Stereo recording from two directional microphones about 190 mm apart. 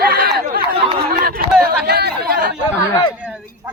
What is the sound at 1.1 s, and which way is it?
Speech, 50° right (ahead or behind).